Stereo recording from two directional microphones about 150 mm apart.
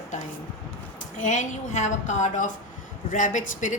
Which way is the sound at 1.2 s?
55° left (ahead or behind).